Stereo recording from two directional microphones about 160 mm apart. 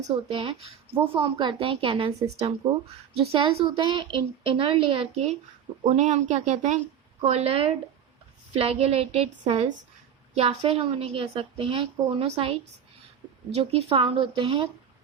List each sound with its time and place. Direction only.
0.3 s a woman's voice: 40° right (ahead or behind)